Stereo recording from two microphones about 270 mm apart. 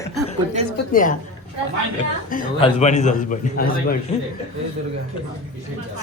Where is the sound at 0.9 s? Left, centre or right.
Left.